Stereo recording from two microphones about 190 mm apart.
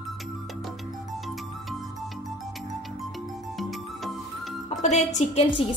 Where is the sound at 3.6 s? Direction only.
Centre (ahead or behind).